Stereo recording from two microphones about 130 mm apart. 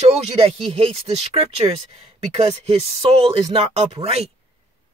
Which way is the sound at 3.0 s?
50° right (ahead or behind).